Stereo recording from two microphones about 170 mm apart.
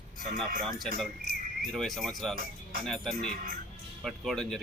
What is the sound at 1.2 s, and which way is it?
Cricket, 60° right (ahead or behind).